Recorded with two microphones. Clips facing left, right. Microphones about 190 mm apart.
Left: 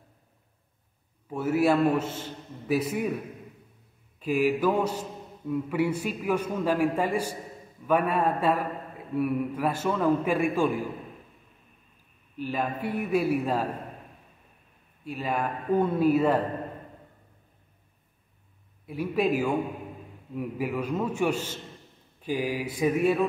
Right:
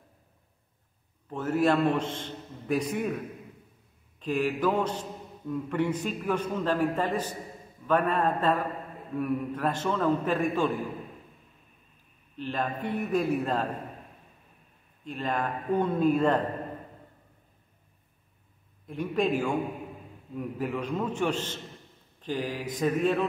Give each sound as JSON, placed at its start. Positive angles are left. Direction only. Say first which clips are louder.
{"t": 1.3, "sound": "a man's voice", "louder": "left 2 dB", "side_deg": 10}
{"t": 4.2, "sound": "a man's voice", "louder": "left 3 dB", "side_deg": 10}
{"t": 12.4, "sound": "a man's voice", "louder": "left 2 dB", "side_deg": 10}
{"t": 15.0, "sound": "a man's voice", "louder": "left 1 dB", "side_deg": 10}
{"t": 18.9, "sound": "a man's voice", "louder": "left 1 dB", "side_deg": 5}